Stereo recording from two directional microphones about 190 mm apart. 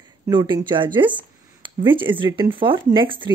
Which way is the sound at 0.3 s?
25° right (ahead or behind).